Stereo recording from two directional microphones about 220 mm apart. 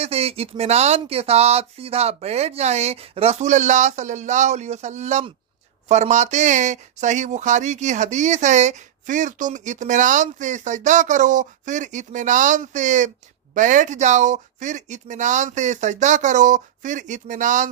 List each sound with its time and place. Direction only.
0.0 s speech: 25° right (ahead or behind)